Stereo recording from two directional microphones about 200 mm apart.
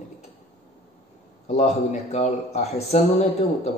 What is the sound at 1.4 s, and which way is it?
Speech, 35° left (ahead or behind).